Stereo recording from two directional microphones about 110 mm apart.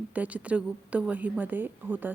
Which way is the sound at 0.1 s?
15° right (ahead or behind).